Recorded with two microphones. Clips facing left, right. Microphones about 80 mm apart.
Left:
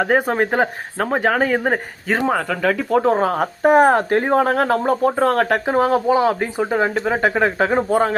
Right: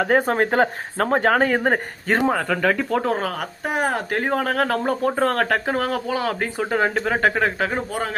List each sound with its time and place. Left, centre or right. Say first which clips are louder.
0.0 s speech: left 1 dB; centre
3.0 s speech: left 6 dB; left
4.1 s speech: left 6 dB; left
5.5 s speech: left 5 dB; centre
6.7 s speech: left 1 dB; centre
7.8 s speech: left 9 dB; left